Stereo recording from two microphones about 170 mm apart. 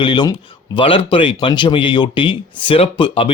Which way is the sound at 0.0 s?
25° left (ahead or behind).